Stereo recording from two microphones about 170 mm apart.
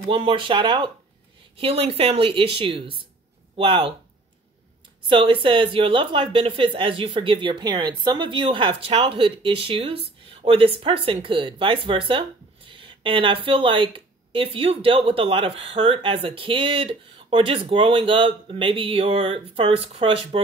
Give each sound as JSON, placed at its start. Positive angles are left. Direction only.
{"t": 0.1, "sound": "speech", "side_deg": -30}
{"t": 5.1, "sound": "speech", "side_deg": -30}